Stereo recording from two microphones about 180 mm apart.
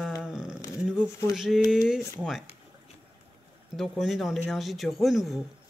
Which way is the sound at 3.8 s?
Centre (ahead or behind).